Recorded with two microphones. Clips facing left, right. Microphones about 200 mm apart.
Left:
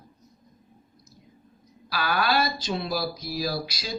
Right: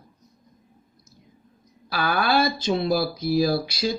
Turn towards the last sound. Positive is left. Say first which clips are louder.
# right 8 dB
turn(degrees=-55)  # may be behind; listen again after turning